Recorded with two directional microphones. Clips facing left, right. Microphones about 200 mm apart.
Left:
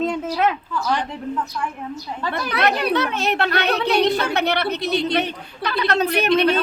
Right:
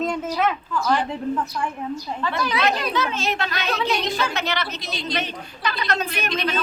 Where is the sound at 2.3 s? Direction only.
65° left (ahead or behind).